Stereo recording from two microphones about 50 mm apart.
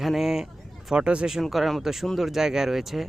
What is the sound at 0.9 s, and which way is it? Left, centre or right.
Speech, centre.